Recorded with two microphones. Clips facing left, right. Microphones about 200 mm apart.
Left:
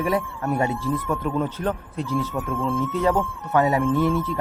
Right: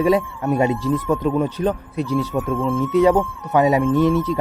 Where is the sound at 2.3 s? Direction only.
Centre (ahead or behind).